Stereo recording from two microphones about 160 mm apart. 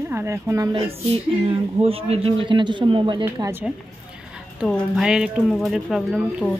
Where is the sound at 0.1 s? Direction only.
15° right (ahead or behind).